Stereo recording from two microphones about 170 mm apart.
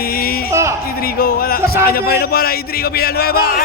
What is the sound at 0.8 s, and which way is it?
A man's voice, 65° left (ahead or behind).